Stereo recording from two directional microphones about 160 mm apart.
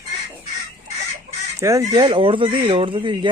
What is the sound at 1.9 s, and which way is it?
Speech, 30° right (ahead or behind).